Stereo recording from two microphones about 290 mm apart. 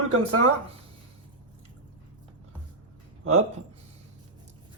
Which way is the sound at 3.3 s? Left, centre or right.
Right.